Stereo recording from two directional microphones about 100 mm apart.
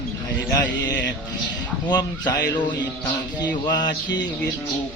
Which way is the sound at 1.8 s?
45° left (ahead or behind).